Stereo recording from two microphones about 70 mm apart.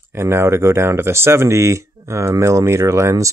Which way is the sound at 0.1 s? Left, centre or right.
Right.